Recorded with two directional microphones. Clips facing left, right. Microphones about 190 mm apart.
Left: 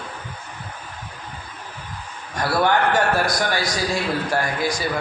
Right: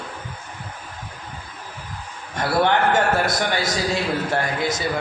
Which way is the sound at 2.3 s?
20° right (ahead or behind).